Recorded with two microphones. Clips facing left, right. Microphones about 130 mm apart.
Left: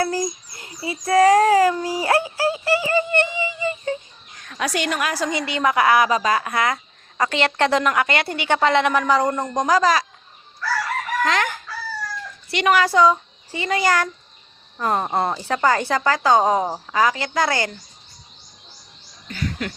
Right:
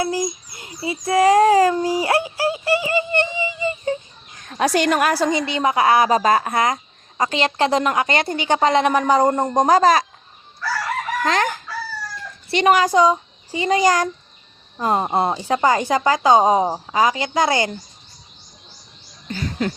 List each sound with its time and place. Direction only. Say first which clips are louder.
0.0 s babbling: even; 15° right (ahead or behind)
4.4 s a woman's voice: right 6 dB; 35° right (ahead or behind)
5.4 s a woman's voice: right 1 dB; 25° right (ahead or behind); by 6.3 s 40° right (ahead or behind)
6.3 s a woman's voice: right 3 dB; 25° right (ahead or behind)
9.0 s a woman's voice: right 3 dB; 25° right (ahead or behind)
9.3 s a woman's voice: right 4 dB; 35° right (ahead or behind)
11.2 s speech: right 1 dB; 30° right (ahead or behind)
19.3 s a sound: right 4 dB; 30° right (ahead or behind)